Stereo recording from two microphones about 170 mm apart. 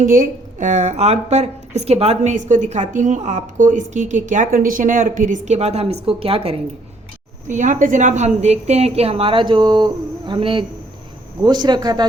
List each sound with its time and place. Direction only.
0.0 s a woman's voice: 50° right (ahead or behind)
7.4 s a woman's voice: 45° right (ahead or behind); by 12.0 s 25° right (ahead or behind)